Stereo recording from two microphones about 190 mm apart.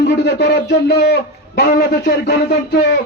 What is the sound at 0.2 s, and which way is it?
A man's voice, 65° left (ahead or behind).